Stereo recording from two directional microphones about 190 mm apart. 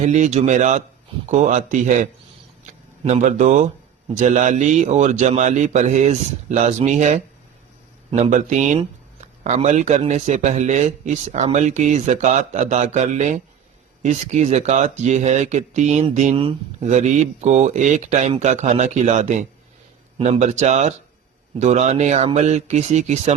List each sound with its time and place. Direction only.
0.0 s speech: 40° right (ahead or behind)